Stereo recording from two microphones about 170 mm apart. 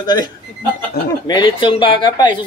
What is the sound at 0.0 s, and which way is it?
Speech, 25° left (ahead or behind).